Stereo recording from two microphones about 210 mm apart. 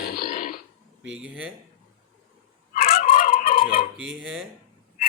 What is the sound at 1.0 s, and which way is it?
Speech, 5° right (ahead or behind).